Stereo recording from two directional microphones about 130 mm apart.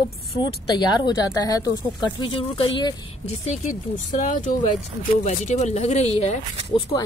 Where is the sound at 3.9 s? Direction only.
80° left.